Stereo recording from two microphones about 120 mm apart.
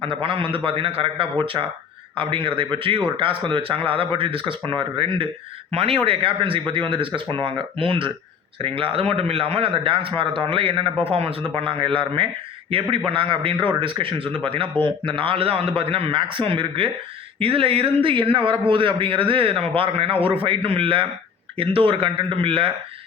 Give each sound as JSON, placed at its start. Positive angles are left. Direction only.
{"t": 0.0, "sound": "a man's voice", "side_deg": -45}